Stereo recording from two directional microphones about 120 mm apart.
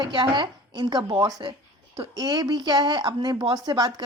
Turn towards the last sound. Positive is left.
turn(degrees=-35)  # may be behind; listen again after turning